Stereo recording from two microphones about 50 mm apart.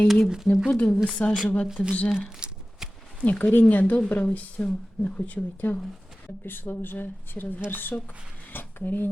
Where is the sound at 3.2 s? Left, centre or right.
Left.